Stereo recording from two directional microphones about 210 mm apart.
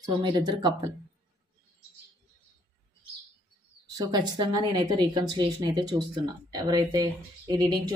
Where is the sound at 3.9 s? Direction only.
20° right (ahead or behind).